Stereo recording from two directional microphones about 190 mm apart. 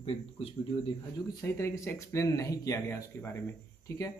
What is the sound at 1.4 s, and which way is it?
Speech, 15° left (ahead or behind).